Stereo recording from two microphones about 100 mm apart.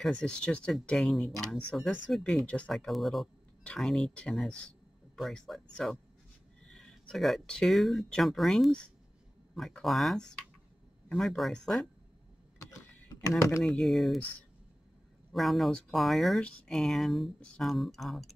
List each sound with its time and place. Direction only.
0.0 s speech: 10° left (ahead or behind)
2.7 s speech: centre (ahead or behind)
13.6 s speech: 5° left (ahead or behind)
15.3 s speech: centre (ahead or behind)